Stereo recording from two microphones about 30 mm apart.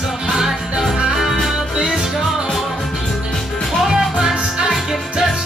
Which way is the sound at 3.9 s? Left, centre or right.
Right.